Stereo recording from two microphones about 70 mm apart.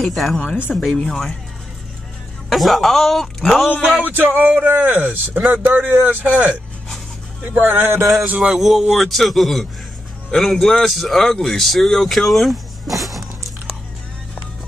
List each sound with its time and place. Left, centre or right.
0.0 s a man's voice: centre
2.5 s a man's voice: centre
4.0 s speech: right
8.3 s music: centre
8.5 s a man's voice: centre